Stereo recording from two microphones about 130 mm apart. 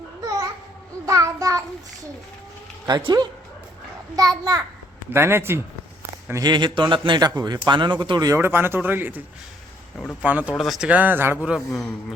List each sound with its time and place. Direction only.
0.2 s babbling: 30° right (ahead or behind)
1.0 s a child's voice: 25° right (ahead or behind)
2.8 s a man's voice: 35° right (ahead or behind)
5.1 s a child's voice: 20° right (ahead or behind)
6.4 s a man's voice: 35° right (ahead or behind)
8.4 s speech: 15° right (ahead or behind)